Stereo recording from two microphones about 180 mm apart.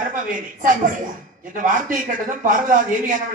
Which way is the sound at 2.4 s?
45° right (ahead or behind).